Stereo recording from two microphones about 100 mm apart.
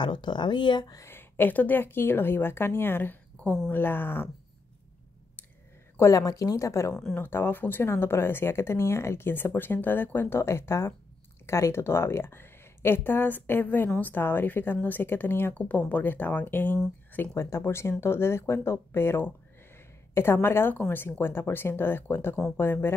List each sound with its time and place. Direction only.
0.0 s speech: 50° left (ahead or behind)
1.0 s a woman's voice: 25° left (ahead or behind)
5.9 s speech: 35° left (ahead or behind)
20.4 s speech: 20° left (ahead or behind)